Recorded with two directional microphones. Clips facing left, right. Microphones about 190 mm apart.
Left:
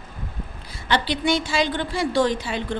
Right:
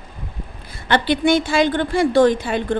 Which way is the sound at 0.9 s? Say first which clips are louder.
Right 5 dB; 55° right (ahead or behind).